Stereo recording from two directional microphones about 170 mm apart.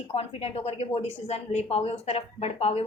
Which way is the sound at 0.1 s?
35° left (ahead or behind).